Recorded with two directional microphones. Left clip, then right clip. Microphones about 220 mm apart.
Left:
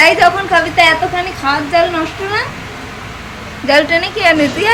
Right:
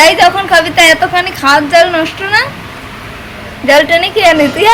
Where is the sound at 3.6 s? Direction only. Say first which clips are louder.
Right 4 dB; 20° right (ahead or behind).